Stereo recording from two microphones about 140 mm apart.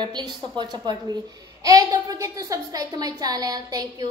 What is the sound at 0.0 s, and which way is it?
A woman's voice, 30° right (ahead or behind).